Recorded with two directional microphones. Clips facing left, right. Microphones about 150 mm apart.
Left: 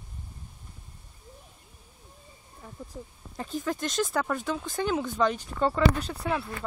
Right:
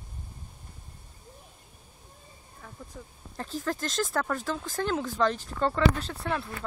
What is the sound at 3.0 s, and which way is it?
Speech, 25° left (ahead or behind).